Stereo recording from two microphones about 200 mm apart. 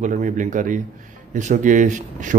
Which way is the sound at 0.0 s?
40° right (ahead or behind).